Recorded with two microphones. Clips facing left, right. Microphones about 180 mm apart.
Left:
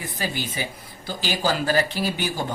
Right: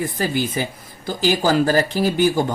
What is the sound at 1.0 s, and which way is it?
Speech, 45° right (ahead or behind).